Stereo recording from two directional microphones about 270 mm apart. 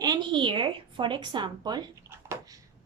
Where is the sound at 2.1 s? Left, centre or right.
Centre.